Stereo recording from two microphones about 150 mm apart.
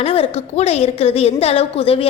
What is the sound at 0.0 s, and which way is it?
A woman's voice, 40° left (ahead or behind).